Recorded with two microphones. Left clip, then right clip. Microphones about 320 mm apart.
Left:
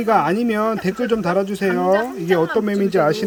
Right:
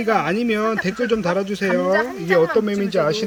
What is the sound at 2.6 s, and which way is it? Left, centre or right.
Speech, centre.